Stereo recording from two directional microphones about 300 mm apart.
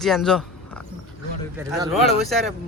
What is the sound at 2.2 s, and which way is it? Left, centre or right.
Speech, centre.